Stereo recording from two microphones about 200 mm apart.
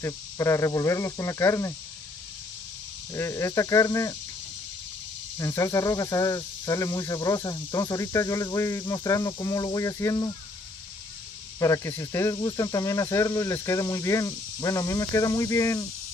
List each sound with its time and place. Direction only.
0.0 s speech: 15° left (ahead or behind)
3.1 s speech: 15° left (ahead or behind)
5.4 s speech: 15° left (ahead or behind)
11.6 s speech: 15° left (ahead or behind)